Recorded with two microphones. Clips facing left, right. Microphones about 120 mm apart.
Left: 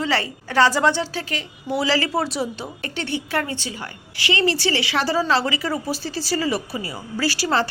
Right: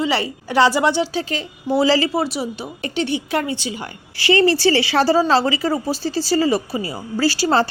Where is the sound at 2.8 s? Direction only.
20° right (ahead or behind).